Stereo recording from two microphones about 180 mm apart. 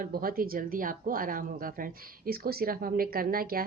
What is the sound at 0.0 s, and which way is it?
Speech, 55° right (ahead or behind).